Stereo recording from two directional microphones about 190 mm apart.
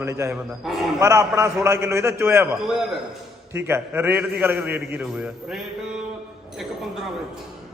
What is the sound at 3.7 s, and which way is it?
A man's voice, 10° right (ahead or behind).